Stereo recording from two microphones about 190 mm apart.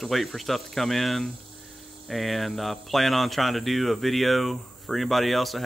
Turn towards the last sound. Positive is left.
turn(degrees=0)  # may be behind; listen again after turning